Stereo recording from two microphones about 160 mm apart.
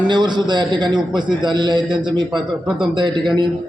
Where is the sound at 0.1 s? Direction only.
30° right (ahead or behind).